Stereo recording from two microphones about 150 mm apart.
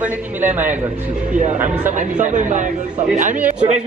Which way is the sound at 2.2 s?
60° right (ahead or behind).